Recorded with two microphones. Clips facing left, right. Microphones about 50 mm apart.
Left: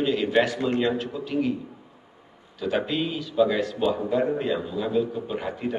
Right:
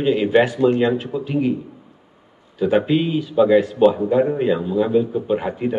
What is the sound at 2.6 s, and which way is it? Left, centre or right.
A man's voice, right.